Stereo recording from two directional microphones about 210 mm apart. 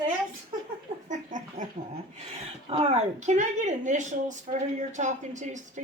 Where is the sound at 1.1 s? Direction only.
35° right (ahead or behind).